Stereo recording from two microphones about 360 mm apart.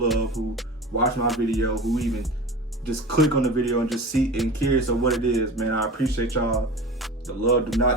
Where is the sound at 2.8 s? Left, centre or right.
Left.